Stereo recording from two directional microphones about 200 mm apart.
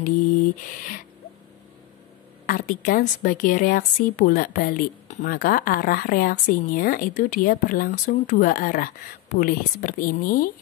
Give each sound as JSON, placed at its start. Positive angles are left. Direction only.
{"t": 2.4, "sound": "a woman's voice", "side_deg": 45}